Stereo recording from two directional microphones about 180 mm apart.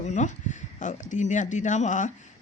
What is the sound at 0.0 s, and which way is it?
Speech, 40° left (ahead or behind).